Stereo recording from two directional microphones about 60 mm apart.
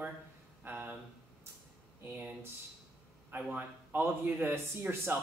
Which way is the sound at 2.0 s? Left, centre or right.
Right.